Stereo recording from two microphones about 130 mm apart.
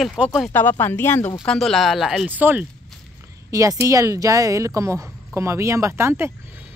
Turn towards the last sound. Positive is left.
turn(degrees=-20)  # may be behind; listen again after turning